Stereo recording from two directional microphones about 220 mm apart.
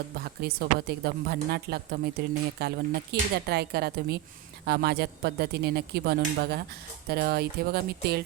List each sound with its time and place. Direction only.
0.2 s speech: 45° right (ahead or behind)